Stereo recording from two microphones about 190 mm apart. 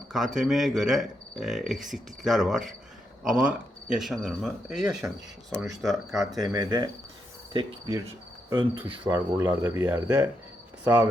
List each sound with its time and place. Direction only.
0.1 s speech: centre (ahead or behind)
6.1 s speech: 20° right (ahead or behind)